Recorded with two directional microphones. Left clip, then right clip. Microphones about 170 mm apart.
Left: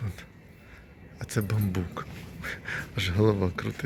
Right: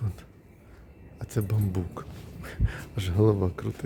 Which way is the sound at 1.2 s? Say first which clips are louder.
Left 1 dB; 15° right (ahead or behind).